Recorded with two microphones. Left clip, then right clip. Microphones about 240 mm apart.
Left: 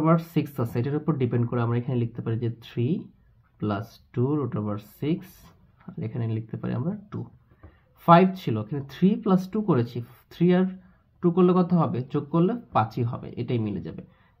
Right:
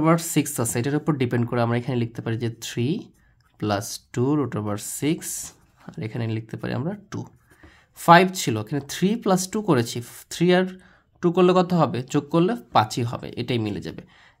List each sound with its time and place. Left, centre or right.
0.0 s speech: right